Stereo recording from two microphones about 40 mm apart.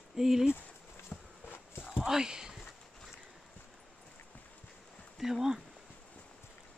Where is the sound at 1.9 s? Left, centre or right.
Centre.